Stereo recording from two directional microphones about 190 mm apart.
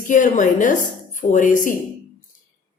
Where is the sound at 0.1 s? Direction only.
40° left (ahead or behind).